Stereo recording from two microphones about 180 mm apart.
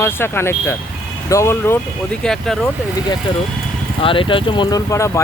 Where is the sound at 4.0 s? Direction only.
30° left (ahead or behind).